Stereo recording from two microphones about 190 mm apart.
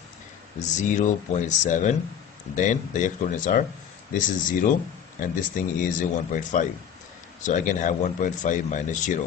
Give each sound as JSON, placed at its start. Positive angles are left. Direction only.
{"t": 0.6, "sound": "speech", "side_deg": 40}